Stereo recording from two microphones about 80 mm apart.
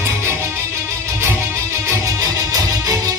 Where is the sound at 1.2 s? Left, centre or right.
Right.